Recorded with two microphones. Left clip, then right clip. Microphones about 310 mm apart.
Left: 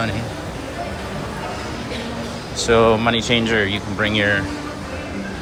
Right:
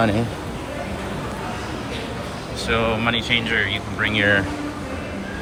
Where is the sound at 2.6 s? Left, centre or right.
Centre.